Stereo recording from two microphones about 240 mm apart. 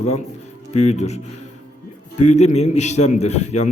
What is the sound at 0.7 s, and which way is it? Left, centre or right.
Speech, left.